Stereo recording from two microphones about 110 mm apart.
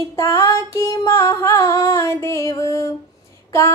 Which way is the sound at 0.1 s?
25° left (ahead or behind).